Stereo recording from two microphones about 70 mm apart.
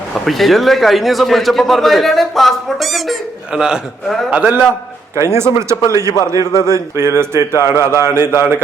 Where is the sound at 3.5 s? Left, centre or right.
Centre.